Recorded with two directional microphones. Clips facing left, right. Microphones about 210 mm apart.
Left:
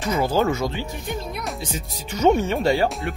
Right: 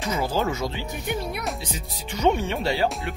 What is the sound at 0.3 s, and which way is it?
Speech, 55° left (ahead or behind).